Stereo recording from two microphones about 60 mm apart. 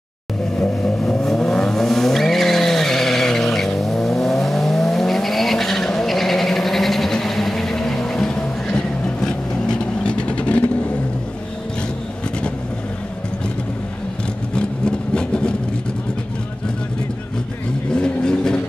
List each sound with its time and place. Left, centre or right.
0.6 s vehicle: centre
14.5 s vehicle: centre
17.9 s vehicle: centre